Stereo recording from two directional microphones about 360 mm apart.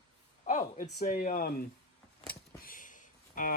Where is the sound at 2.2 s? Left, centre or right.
Left.